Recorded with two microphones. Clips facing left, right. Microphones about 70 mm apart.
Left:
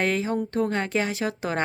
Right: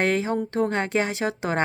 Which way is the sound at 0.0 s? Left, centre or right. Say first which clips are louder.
Right 2 dB; right.